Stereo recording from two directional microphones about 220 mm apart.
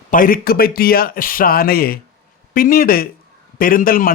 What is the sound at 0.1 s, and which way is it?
Speech, 40° left (ahead or behind).